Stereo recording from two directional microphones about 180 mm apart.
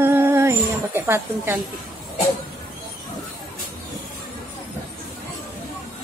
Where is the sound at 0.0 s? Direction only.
10° right (ahead or behind).